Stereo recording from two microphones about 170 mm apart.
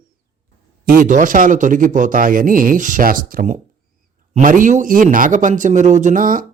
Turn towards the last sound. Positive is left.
turn(degrees=-55)  # may be behind; listen again after turning